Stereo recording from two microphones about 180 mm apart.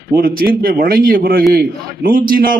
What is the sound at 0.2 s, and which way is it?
A man's voice, 55° right (ahead or behind).